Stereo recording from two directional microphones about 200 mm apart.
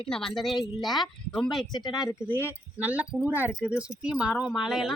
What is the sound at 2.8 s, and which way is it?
A woman's voice, 5° right (ahead or behind).